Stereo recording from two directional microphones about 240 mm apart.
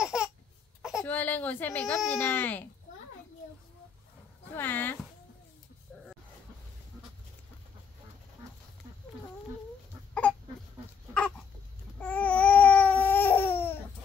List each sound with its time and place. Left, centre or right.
0.0 s a sound: centre
0.8 s speech: centre
4.6 s speech: centre
12.0 s babbling: centre